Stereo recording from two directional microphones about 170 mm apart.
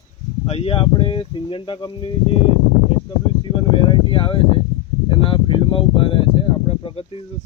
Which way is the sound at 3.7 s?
30° left (ahead or behind).